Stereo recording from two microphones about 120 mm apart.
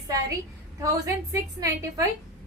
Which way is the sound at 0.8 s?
30° right (ahead or behind).